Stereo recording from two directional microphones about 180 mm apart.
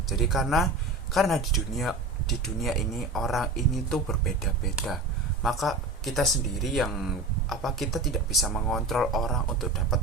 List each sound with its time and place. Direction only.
0.1 s speech: centre (ahead or behind)
5.4 s speech: centre (ahead or behind)